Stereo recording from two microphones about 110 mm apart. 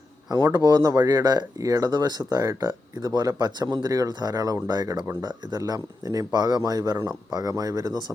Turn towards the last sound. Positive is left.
turn(degrees=-35)  # may be behind; listen again after turning